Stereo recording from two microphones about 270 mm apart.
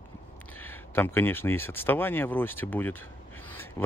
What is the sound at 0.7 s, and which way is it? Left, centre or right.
Speech, centre.